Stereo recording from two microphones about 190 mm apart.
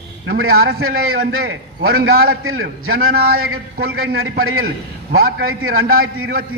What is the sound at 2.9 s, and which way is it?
A man's voice, 55° right (ahead or behind).